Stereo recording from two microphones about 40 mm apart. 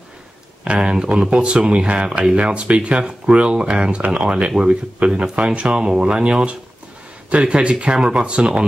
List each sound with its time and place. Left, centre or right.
0.7 s speech: right